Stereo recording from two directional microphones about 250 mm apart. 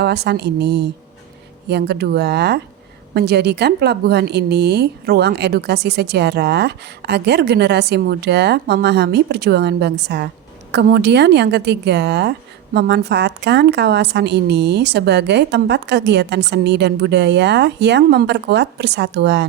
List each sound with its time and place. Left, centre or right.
0.0 s a woman's voice: right